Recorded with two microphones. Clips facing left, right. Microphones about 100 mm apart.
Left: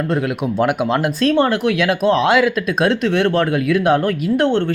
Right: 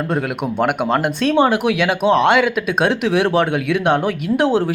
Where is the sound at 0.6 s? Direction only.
Centre (ahead or behind).